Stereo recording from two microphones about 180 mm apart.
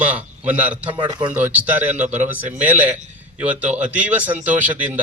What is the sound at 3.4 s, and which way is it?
A man's voice, 10° right (ahead or behind).